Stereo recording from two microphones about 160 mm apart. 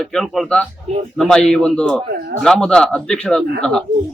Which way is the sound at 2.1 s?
75° right (ahead or behind).